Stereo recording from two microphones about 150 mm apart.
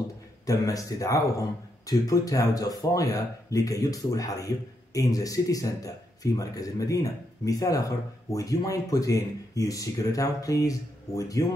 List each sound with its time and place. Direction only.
0.5 s speech: 20° left (ahead or behind)